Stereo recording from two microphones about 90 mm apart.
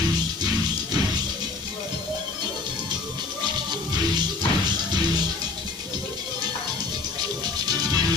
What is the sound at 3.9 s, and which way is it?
Music, 50° right (ahead or behind).